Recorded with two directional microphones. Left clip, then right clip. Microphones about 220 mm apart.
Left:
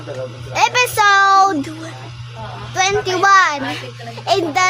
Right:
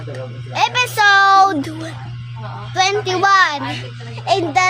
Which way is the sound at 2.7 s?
5° left (ahead or behind).